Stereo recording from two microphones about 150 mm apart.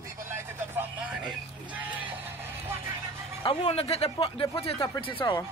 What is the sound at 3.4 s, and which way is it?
Speech, 35° left (ahead or behind).